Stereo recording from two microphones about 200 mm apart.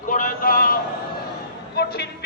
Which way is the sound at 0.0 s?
40° left (ahead or behind).